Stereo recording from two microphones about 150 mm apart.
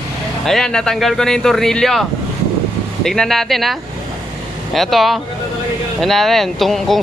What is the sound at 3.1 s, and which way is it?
Speech, centre (ahead or behind).